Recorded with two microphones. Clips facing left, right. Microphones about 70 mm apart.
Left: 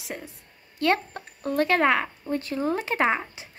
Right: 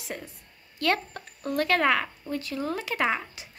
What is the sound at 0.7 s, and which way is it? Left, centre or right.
Speech, left.